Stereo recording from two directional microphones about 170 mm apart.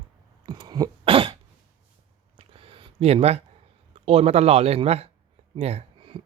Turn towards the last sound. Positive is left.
turn(degrees=-35)  # may be behind; listen again after turning